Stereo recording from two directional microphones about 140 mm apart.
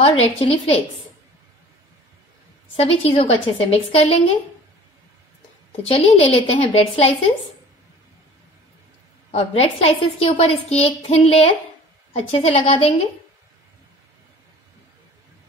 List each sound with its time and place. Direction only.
0.0 s a woman's voice: 45° left (ahead or behind)
2.7 s a woman's voice: 45° left (ahead or behind)
5.9 s a woman's voice: 45° left (ahead or behind)
9.3 s a woman's voice: 45° left (ahead or behind)